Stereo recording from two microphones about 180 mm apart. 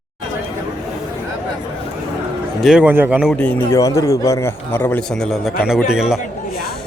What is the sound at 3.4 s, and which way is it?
A man's voice, 15° left (ahead or behind).